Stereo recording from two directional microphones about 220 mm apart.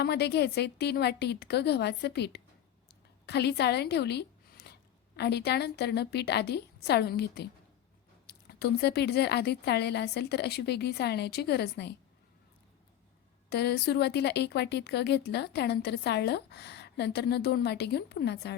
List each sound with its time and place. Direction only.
0.0 s a woman's voice: 50° left (ahead or behind)
13.5 s a woman's voice: 50° left (ahead or behind)